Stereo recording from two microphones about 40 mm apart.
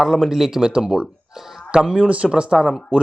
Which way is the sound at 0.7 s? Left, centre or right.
Centre.